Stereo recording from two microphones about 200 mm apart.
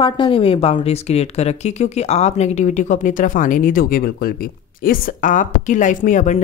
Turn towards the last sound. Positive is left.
turn(degrees=40)  # may be behind; listen again after turning